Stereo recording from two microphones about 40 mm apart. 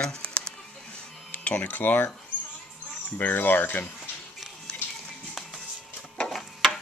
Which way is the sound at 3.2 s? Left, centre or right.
Left.